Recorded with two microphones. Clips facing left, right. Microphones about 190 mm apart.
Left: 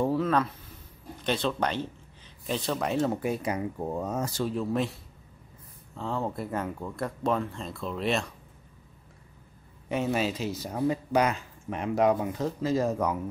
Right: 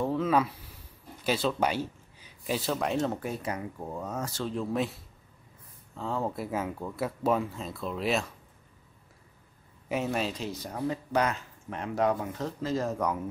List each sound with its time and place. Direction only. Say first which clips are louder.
1.2 s speech: right 1 dB; 5° right (ahead or behind); by 3.6 s 15° left (ahead or behind)
3.8 s speech: left 4 dB; 25° left (ahead or behind)
4.6 s speech: right 1 dB; centre (ahead or behind)
9.8 s speech: left 2 dB; centre (ahead or behind)